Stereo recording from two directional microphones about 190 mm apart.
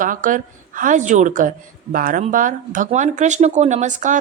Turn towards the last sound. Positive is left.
turn(degrees=-40)  # may be behind; listen again after turning